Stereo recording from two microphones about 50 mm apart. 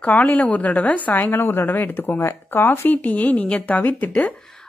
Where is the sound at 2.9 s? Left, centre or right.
Left.